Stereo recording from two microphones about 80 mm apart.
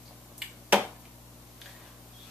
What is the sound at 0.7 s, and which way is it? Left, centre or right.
Finger snapping, centre.